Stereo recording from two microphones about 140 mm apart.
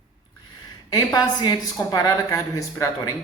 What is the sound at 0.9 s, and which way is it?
Speech, 30° left (ahead or behind).